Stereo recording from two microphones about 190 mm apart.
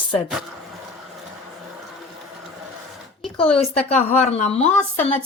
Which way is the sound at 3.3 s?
30° left (ahead or behind).